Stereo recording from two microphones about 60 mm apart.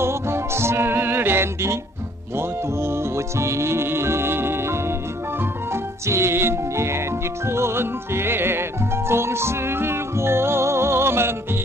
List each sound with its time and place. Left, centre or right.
0.0 s music: right